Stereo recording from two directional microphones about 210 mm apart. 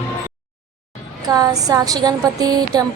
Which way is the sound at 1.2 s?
15° right (ahead or behind).